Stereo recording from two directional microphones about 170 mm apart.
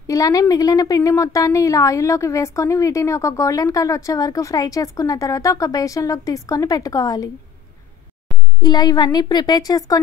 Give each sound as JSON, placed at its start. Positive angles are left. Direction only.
{"t": 0.0, "sound": "a woman's voice", "side_deg": 20}
{"t": 8.5, "sound": "a woman's voice", "side_deg": 25}